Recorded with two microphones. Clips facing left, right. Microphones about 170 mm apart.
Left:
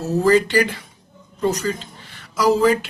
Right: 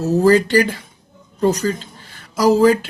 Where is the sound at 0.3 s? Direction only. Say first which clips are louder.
Right 2 dB; 45° right (ahead or behind).